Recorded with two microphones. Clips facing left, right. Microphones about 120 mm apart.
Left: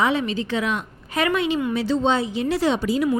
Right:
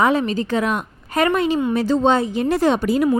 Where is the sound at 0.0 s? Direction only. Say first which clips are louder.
Right 4 dB; 45° right (ahead or behind).